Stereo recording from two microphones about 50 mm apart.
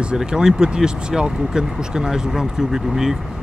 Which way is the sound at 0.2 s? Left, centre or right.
Centre.